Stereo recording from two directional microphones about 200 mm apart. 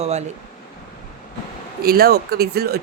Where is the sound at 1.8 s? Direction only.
50° right (ahead or behind).